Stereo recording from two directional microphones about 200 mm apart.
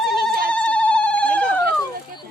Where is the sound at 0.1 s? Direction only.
50° right (ahead or behind).